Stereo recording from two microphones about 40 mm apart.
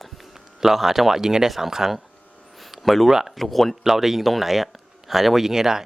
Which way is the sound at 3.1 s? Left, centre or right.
Centre.